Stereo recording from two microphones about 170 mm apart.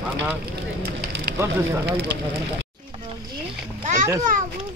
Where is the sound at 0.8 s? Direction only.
70° right (ahead or behind).